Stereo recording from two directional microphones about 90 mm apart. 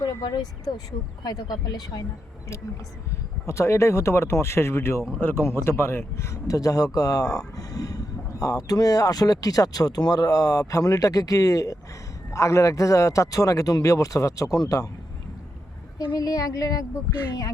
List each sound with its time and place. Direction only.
0.0 s speech: 45° left (ahead or behind)
3.4 s speech: 30° left (ahead or behind)
16.1 s speech: 45° left (ahead or behind)